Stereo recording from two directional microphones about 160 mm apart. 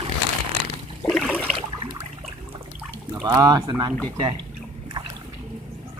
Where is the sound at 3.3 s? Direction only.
25° right (ahead or behind).